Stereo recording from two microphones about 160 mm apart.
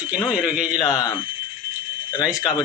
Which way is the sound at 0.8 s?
20° left (ahead or behind).